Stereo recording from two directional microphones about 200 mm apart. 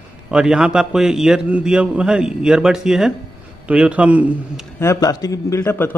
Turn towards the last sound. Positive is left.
turn(degrees=10)  # may be behind; listen again after turning